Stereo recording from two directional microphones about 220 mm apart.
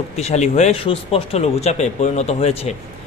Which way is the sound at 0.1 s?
30° left (ahead or behind).